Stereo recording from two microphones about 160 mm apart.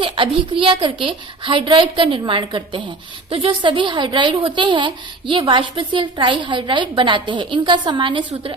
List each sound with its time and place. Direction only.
0.0 s a woman's voice: 35° right (ahead or behind)